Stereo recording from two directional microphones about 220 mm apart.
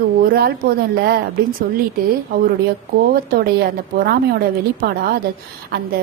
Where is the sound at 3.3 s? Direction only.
45° right (ahead or behind).